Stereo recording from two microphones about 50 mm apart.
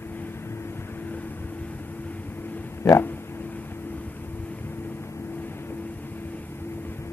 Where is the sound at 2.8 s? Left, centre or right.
Left.